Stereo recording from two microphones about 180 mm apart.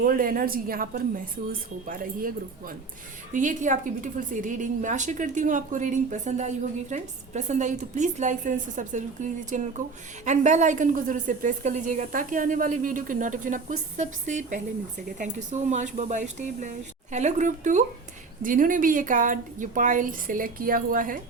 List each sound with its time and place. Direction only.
0.0 s a woman's voice: 50° right (ahead or behind)